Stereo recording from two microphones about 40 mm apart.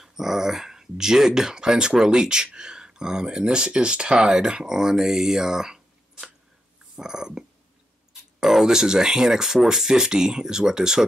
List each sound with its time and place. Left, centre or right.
0.0 s speech: centre